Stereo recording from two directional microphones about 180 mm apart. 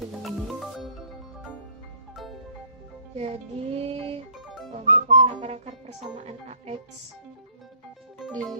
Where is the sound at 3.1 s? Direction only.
35° right (ahead or behind).